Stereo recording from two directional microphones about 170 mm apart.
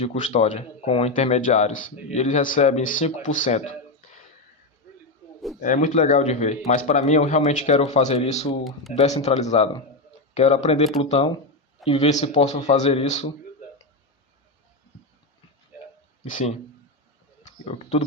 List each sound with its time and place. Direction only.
0.0 s speech: 40° left (ahead or behind)
5.5 s speech: 50° left (ahead or behind)
16.3 s speech: 45° left (ahead or behind)